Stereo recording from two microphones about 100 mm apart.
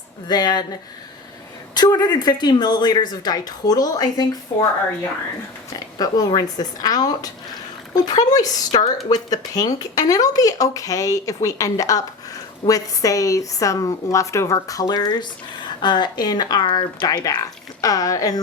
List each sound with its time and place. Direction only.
0.3 s speech: 45° left (ahead or behind)
1.7 s speech: 45° left (ahead or behind)
5.7 s speech: 40° left (ahead or behind)